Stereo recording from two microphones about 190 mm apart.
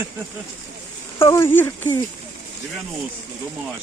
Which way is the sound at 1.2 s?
15° left (ahead or behind).